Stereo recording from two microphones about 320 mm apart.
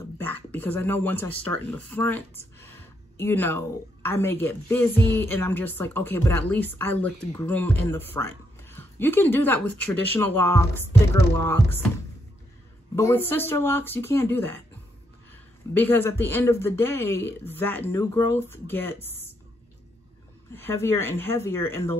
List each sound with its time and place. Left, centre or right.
0.2 s speech: centre
12.9 s speech: centre
15.7 s speech: centre
20.5 s speech: centre